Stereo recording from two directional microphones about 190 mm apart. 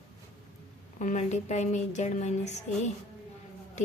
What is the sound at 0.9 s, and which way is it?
Speech, 40° left (ahead or behind).